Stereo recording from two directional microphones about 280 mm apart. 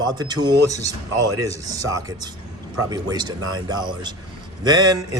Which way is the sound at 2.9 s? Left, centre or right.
Centre.